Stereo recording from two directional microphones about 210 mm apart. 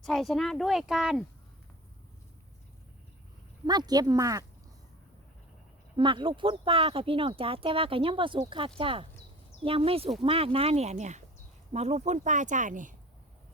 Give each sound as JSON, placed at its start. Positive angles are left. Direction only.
{"t": 0.0, "sound": "speech", "side_deg": 0}
{"t": 3.7, "sound": "speech", "side_deg": -20}
{"t": 6.0, "sound": "speech", "side_deg": -25}